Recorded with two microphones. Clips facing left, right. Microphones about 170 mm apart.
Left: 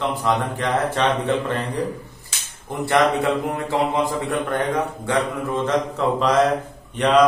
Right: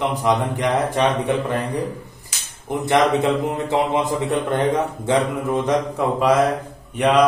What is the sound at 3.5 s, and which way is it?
Mantra, 20° right (ahead or behind).